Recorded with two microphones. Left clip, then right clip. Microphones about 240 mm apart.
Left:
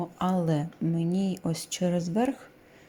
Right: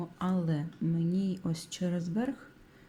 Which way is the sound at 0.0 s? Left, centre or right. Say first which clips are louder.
Left 7 dB; centre.